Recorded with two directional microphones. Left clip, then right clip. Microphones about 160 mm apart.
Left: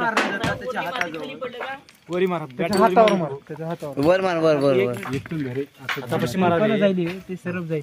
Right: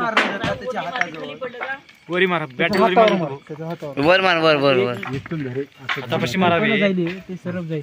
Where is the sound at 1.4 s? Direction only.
35° left (ahead or behind).